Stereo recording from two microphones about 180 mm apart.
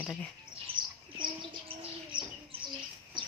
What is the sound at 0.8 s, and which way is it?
Bird, 50° right (ahead or behind).